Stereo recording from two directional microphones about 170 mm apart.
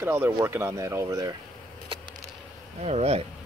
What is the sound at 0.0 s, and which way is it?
Speech, 15° right (ahead or behind).